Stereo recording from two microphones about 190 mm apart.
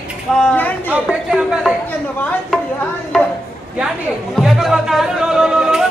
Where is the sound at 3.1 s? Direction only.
Centre (ahead or behind).